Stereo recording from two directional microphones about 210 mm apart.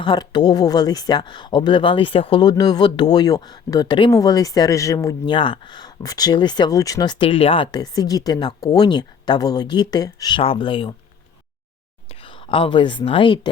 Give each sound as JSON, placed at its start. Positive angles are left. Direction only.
{"t": 0.0, "sound": "speech", "side_deg": 20}
{"t": 12.2, "sound": "a woman's voice", "side_deg": 25}